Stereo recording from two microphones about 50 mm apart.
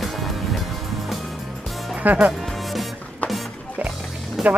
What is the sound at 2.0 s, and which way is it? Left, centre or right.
Speech, right.